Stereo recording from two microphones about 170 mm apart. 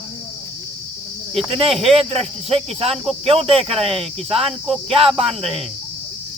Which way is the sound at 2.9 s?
Centre (ahead or behind).